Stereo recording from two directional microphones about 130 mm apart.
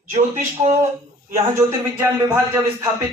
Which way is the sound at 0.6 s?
45° right (ahead or behind).